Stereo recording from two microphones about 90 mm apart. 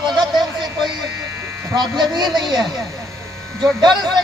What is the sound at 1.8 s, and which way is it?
Speech, 55° right (ahead or behind).